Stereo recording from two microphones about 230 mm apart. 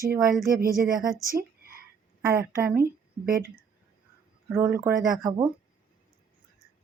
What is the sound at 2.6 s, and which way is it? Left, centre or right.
Speech, centre.